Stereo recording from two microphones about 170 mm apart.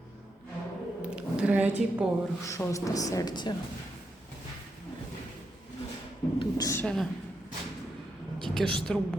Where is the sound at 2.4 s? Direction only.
15° left (ahead or behind).